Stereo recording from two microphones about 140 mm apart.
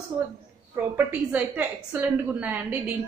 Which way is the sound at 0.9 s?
15° right (ahead or behind).